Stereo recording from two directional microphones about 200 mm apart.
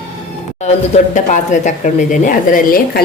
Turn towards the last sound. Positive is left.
turn(degrees=45)  # may be behind; listen again after turning